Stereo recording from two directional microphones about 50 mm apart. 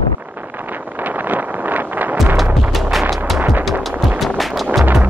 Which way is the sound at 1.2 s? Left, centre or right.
Right.